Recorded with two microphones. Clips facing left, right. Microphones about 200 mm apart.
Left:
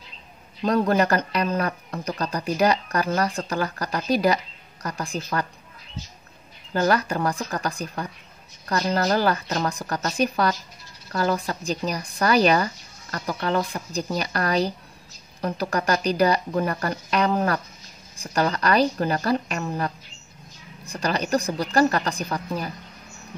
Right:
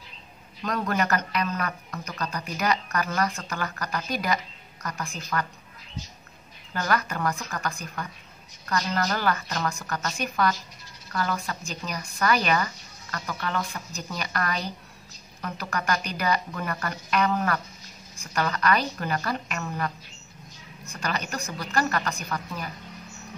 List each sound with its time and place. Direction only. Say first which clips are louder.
0.6 s speech: left 7 dB; 30° left (ahead or behind)
6.7 s speech: left 6 dB; 30° left (ahead or behind)